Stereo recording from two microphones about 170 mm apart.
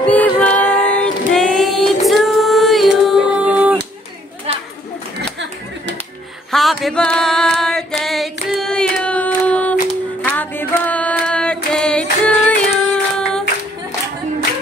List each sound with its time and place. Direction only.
0.0 s female singing: 10° left (ahead or behind); by 3.7 s 10° right (ahead or behind)
4.5 s chatter: 35° right (ahead or behind)
6.5 s a sound: centre (ahead or behind)
8.0 s singing: centre (ahead or behind)
10.2 s female singing: 10° left (ahead or behind)